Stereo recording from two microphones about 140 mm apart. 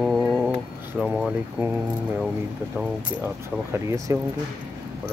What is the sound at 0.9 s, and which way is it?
Vehicle, 5° right (ahead or behind).